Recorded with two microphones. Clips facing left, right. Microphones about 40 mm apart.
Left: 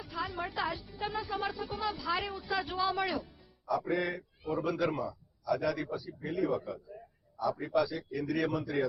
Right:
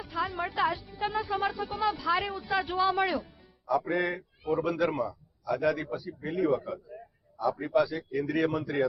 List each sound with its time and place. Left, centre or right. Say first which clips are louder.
0.0 s music: right 5 dB; centre
0.6 s speech: right 8 dB; centre
3.7 s a man's voice: right 4 dB; centre
3.9 s speech: right 3 dB; centre
4.4 s a man's voice: right 4 dB; centre
7.4 s a man's voice: right 4 dB; centre